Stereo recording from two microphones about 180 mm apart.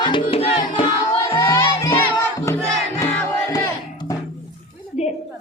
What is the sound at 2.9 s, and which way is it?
Music, 15° left (ahead or behind).